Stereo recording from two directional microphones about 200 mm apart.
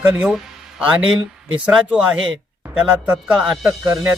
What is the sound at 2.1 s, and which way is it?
Speech, 75° right (ahead or behind).